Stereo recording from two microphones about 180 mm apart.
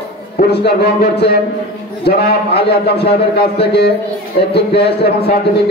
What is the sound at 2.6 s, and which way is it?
A man's voice, 65° left (ahead or behind).